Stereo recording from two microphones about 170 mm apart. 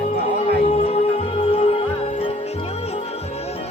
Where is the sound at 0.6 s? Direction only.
40° left (ahead or behind).